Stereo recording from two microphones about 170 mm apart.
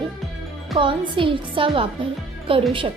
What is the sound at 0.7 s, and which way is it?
A woman's voice, 30° right (ahead or behind).